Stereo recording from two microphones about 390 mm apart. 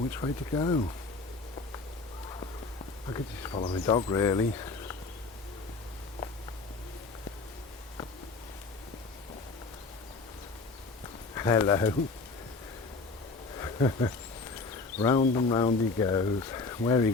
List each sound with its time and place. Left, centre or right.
0.2 s speech: centre
3.1 s speech: centre
11.3 s speech: centre
13.6 s insect: centre
14.9 s speech: centre